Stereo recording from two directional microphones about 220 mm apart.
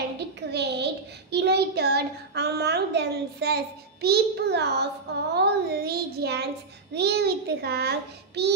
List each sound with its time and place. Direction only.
0.5 s a child's voice: 50° right (ahead or behind)